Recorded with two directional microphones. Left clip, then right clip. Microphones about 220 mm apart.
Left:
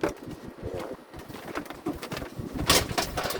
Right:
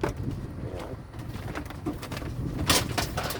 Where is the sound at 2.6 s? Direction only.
5° right (ahead or behind).